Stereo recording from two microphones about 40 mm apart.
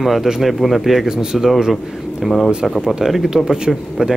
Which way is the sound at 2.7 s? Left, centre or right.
Centre.